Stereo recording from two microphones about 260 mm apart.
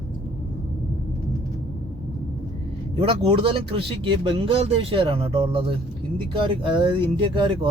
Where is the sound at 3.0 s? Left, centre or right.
Right.